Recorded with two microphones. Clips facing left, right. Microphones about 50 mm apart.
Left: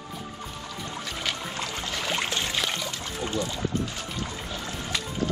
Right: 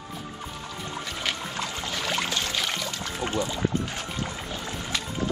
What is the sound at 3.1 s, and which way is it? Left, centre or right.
Music, right.